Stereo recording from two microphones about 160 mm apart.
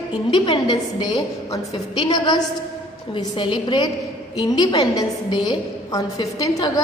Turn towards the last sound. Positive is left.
turn(degrees=20)  # may be behind; listen again after turning